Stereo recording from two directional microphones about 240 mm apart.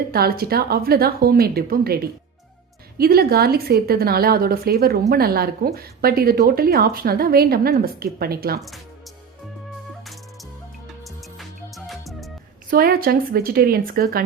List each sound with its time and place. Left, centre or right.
0.1 s a woman's voice: right
11.0 s music: centre
12.7 s a woman's voice: right